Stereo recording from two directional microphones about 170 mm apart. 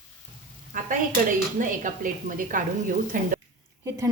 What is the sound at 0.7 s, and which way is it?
Speech, 55° right (ahead or behind).